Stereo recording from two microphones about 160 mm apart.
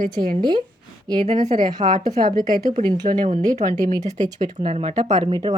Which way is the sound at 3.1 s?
55° right (ahead or behind).